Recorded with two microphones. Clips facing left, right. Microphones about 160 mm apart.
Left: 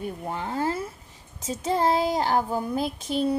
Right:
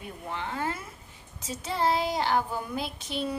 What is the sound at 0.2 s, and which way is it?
A woman's voice, 40° left (ahead or behind).